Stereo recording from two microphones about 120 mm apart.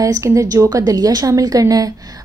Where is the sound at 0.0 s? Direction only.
25° right (ahead or behind).